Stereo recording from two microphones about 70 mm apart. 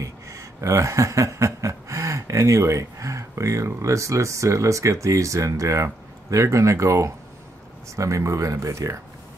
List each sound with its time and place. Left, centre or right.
0.0 s chuckle: right
6.3 s speech: right